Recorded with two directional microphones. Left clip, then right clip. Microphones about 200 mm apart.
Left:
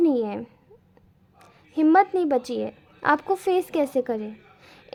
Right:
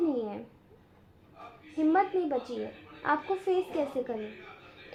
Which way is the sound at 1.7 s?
55° left (ahead or behind).